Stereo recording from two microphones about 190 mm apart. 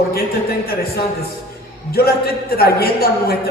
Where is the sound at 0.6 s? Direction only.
55° left (ahead or behind).